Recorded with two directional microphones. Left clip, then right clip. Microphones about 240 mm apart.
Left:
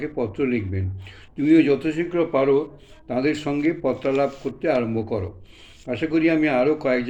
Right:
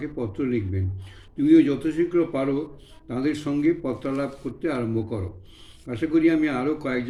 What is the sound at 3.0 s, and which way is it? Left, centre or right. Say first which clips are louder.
Speech: left 4 dB; centre.